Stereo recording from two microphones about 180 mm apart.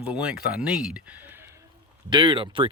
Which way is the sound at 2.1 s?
25° right (ahead or behind).